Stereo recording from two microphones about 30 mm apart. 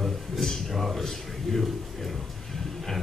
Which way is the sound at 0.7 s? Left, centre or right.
Centre.